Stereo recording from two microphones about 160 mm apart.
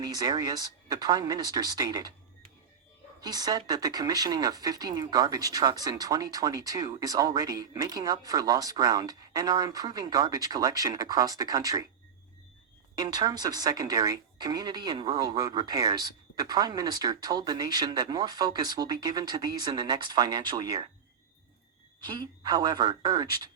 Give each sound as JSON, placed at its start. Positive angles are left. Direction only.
{"t": 0.0, "sound": "speech", "side_deg": -25}
{"t": 13.0, "sound": "speech", "side_deg": -25}
{"t": 22.0, "sound": "speech", "side_deg": -25}